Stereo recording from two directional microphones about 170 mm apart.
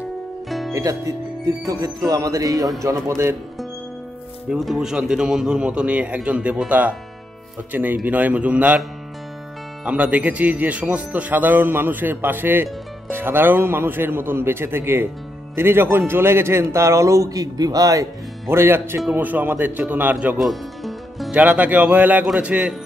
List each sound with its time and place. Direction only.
0.5 s music: centre (ahead or behind)
0.7 s speech: 20° right (ahead or behind)
4.5 s speech: 5° right (ahead or behind)
9.8 s speech: 5° right (ahead or behind)